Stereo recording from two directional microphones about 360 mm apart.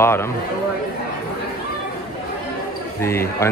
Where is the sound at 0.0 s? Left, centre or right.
Centre.